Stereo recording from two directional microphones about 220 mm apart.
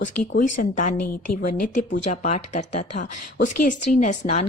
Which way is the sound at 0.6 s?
35° left (ahead or behind).